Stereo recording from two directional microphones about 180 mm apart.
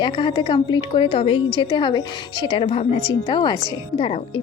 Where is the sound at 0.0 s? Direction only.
25° left (ahead or behind).